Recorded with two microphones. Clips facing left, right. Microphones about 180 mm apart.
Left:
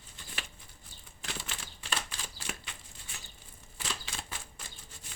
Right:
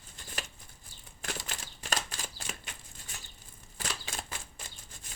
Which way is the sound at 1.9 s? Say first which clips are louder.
Right 2 dB; 45° right (ahead or behind).